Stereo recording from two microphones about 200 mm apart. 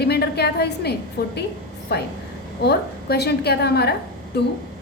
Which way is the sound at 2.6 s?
55° left (ahead or behind).